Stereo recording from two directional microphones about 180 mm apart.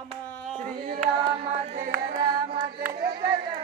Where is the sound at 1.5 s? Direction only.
50° right (ahead or behind).